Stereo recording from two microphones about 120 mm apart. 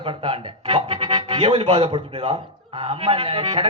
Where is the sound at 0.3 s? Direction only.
45° right (ahead or behind).